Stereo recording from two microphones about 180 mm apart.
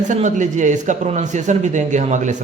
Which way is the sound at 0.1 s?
45° right (ahead or behind).